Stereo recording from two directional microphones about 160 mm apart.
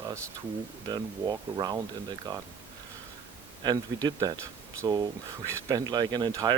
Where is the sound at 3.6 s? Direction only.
25° right (ahead or behind).